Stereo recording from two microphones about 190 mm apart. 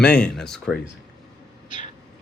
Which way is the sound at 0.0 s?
5° left (ahead or behind).